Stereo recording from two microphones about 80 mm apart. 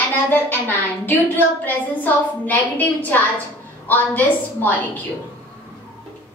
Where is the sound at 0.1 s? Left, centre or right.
Left.